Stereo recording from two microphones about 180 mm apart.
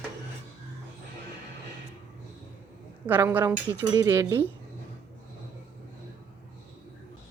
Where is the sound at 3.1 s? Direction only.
10° right (ahead or behind).